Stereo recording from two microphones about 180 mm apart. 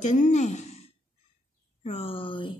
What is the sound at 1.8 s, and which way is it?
Speech, 35° left (ahead or behind).